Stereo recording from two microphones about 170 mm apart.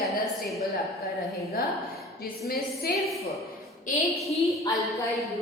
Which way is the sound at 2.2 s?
60° left (ahead or behind).